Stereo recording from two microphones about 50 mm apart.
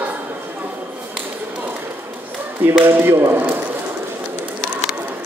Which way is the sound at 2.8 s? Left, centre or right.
Right.